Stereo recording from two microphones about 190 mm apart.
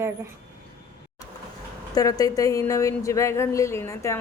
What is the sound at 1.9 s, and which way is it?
Speech, 20° left (ahead or behind).